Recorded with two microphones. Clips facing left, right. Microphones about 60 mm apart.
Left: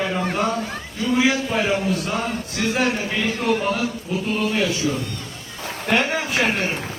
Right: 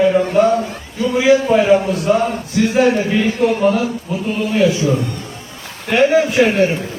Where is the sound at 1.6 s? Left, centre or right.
Centre.